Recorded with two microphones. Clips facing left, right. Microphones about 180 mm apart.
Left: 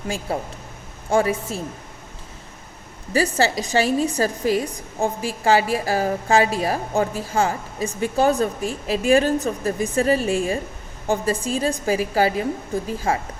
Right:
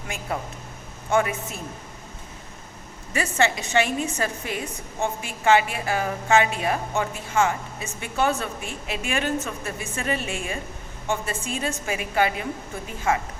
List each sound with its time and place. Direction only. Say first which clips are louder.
0.3 s a woman's voice: left 3 dB; 30° left (ahead or behind)
3.1 s a woman's voice: left 4 dB; 35° left (ahead or behind)